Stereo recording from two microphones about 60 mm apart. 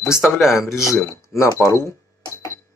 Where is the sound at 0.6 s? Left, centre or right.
Left.